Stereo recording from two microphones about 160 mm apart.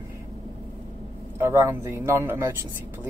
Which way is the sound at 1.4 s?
20° right (ahead or behind).